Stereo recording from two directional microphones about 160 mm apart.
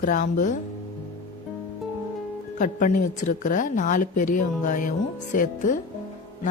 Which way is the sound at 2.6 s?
55° left (ahead or behind).